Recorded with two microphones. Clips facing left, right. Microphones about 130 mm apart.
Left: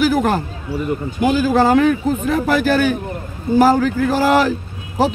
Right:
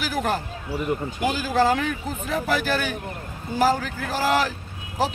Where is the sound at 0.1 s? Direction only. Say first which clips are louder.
Left 8 dB; 55° left (ahead or behind).